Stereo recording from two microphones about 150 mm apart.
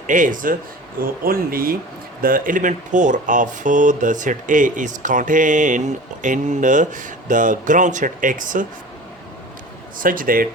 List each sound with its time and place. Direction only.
0.1 s speech: 60° right (ahead or behind)
0.9 s speech: 75° right (ahead or behind)
10.0 s speech: 65° right (ahead or behind)